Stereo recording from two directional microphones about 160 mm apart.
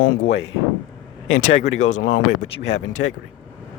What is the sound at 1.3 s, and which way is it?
Speech, 50° left (ahead or behind).